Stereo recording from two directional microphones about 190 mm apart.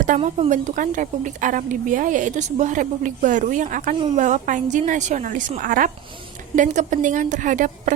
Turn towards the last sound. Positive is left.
turn(degrees=-40)  # may be behind; listen again after turning